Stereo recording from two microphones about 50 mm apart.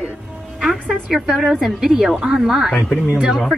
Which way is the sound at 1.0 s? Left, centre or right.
Centre.